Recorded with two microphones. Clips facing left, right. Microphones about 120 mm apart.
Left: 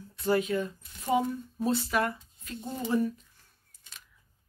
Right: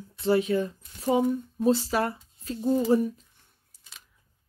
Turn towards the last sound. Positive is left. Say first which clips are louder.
# right 7 dB
turn(degrees=-35)  # may be behind; listen again after turning